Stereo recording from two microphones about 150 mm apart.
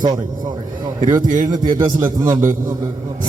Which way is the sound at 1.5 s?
25° right (ahead or behind).